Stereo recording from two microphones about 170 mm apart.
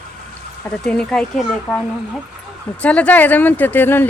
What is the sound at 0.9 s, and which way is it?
Speech, 5° left (ahead or behind).